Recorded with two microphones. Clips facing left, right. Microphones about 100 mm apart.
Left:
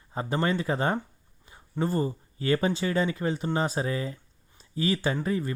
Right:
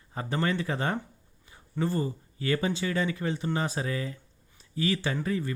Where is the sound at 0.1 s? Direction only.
25° left (ahead or behind).